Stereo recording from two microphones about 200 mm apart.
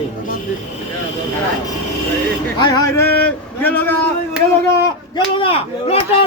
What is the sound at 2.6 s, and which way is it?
Speech, 15° left (ahead or behind).